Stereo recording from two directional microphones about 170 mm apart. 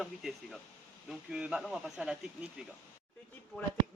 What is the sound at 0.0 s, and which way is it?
Speech, centre (ahead or behind).